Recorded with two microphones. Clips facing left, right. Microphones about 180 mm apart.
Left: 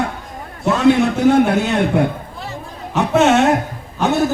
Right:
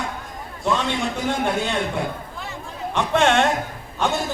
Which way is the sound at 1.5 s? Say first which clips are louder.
Left 7 dB; 65° left (ahead or behind).